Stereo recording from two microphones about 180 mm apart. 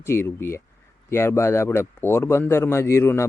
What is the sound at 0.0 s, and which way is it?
Speech, 15° left (ahead or behind).